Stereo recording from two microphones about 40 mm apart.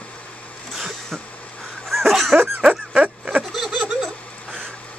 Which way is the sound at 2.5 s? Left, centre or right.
Right.